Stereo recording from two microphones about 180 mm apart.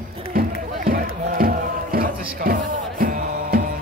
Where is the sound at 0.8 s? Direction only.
55° right (ahead or behind).